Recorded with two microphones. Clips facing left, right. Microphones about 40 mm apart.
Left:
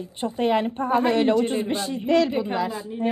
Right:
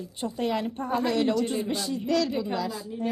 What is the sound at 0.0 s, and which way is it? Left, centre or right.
A woman's voice, left.